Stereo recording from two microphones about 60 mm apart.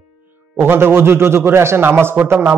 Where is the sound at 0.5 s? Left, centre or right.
Right.